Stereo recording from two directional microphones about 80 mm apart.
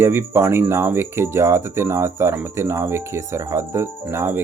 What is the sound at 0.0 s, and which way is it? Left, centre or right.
Insect, right.